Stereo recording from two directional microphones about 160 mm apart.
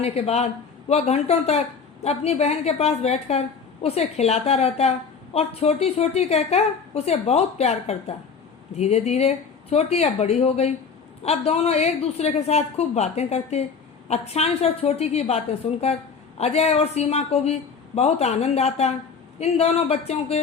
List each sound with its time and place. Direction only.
0.0 s a woman's voice: 40° left (ahead or behind)